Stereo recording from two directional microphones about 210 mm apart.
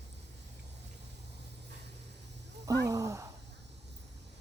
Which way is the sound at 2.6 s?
15° right (ahead or behind).